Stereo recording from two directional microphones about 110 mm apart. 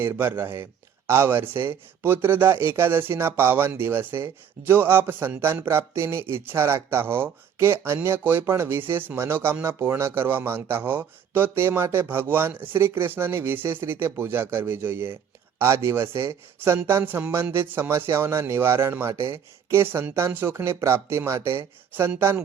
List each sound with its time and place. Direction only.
0.0 s speech: 25° right (ahead or behind)